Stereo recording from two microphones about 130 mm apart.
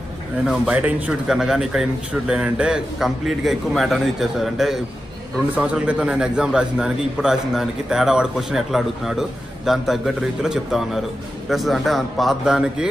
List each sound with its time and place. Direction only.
0.5 s speech: 10° right (ahead or behind)